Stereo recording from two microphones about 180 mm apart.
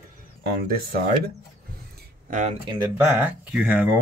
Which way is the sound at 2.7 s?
25° right (ahead or behind).